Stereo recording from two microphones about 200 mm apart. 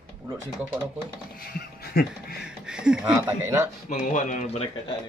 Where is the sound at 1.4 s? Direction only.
50° left (ahead or behind).